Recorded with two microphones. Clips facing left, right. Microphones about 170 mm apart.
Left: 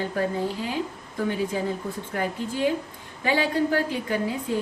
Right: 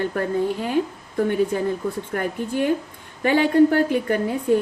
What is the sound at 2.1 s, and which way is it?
A woman's voice, 55° right (ahead or behind).